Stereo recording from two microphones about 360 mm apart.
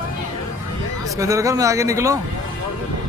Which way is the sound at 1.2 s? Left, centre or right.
Centre.